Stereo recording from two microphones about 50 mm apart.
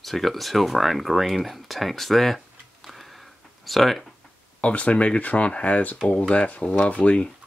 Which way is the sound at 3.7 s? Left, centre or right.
Centre.